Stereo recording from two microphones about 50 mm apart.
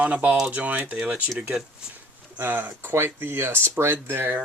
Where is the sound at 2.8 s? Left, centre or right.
Right.